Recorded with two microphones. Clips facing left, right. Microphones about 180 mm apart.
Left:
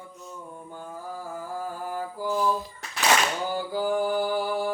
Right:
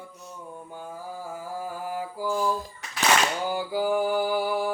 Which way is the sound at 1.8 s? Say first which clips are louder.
Even; 10° right (ahead or behind).